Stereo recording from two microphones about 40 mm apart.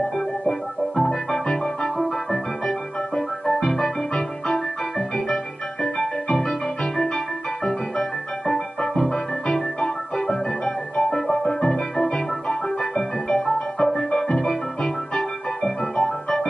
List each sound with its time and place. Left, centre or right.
0.0 s music: centre
5.9 s music: left
6.3 s music: centre